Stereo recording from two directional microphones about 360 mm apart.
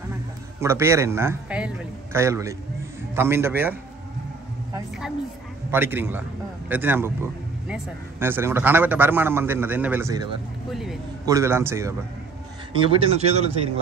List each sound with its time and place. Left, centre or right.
0.6 s speech: centre
5.7 s a man's voice: centre